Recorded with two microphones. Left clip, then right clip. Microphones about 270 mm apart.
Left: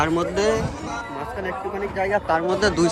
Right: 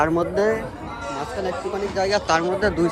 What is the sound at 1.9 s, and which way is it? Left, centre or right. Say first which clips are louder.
Speech: right 1 dB; centre.